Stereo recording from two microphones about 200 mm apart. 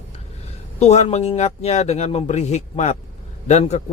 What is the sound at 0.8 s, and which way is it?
Speech, 35° left (ahead or behind).